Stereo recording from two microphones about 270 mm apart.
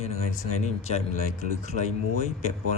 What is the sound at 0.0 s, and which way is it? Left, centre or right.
Speech, left.